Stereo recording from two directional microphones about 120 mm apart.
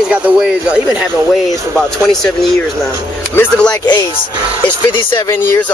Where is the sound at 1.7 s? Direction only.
5° left (ahead or behind).